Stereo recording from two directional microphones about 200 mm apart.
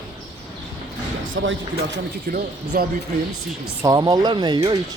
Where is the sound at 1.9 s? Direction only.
50° right (ahead or behind).